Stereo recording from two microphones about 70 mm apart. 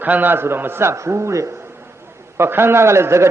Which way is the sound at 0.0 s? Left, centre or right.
Right.